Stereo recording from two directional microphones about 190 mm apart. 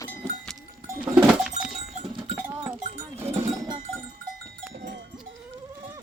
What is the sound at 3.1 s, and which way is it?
Cowbell, 10° right (ahead or behind).